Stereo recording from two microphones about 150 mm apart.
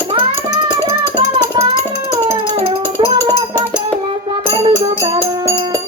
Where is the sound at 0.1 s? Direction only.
35° right (ahead or behind).